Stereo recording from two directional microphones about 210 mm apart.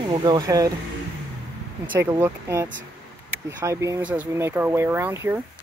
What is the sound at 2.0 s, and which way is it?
Speech, 10° right (ahead or behind).